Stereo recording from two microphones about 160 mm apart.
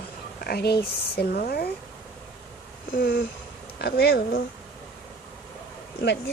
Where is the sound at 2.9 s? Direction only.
70° left (ahead or behind).